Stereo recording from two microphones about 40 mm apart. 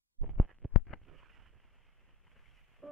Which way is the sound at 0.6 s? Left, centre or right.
Right.